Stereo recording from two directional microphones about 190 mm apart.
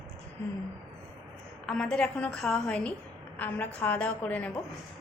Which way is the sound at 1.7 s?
Centre (ahead or behind).